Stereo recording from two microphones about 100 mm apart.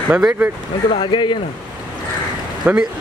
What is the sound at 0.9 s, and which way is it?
Speech, 55° left (ahead or behind).